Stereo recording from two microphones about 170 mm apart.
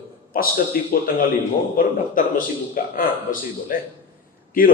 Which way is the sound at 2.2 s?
55° left (ahead or behind).